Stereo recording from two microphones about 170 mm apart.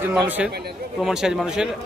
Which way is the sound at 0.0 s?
10° right (ahead or behind).